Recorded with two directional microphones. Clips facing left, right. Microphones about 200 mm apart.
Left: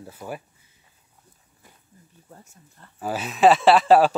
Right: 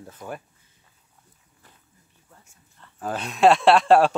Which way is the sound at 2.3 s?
40° left (ahead or behind).